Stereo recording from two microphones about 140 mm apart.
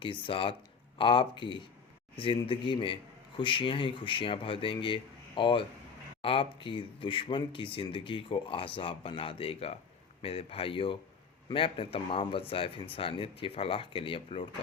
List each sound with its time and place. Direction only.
0.0 s speech: 35° left (ahead or behind)